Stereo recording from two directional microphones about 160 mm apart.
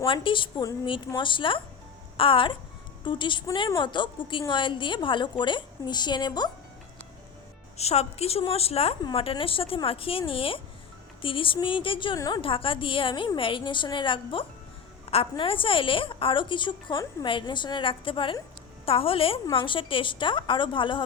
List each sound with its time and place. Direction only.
0.0 s a woman's voice: 30° left (ahead or behind)
7.8 s a woman's voice: 40° left (ahead or behind)